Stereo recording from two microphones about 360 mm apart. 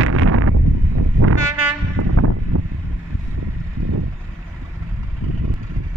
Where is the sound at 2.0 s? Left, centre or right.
Right.